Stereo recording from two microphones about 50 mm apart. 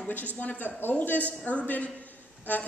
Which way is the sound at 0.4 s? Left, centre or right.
Left.